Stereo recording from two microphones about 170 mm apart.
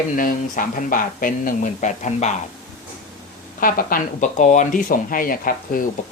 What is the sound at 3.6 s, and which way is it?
Speech, 55° left (ahead or behind).